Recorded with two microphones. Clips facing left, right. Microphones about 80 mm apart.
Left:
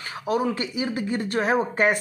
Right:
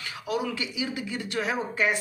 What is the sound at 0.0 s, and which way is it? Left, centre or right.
Speech, left.